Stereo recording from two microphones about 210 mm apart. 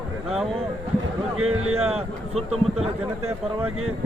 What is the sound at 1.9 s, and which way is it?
Speech, 30° right (ahead or behind).